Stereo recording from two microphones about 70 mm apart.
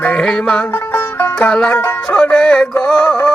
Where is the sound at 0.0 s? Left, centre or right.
Centre.